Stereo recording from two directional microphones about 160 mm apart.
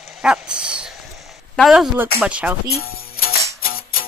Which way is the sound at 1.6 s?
5° right (ahead or behind).